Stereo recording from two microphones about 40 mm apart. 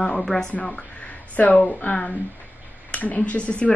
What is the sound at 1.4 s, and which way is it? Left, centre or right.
Speech, left.